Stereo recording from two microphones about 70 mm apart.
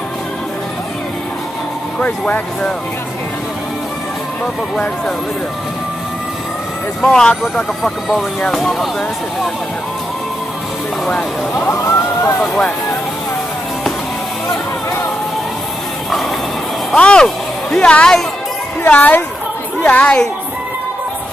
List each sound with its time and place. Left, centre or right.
2.0 s speech: left
7.1 s speech: centre
11.5 s speech: left
14.5 s music: left
16.9 s speech: centre
18.9 s speech: left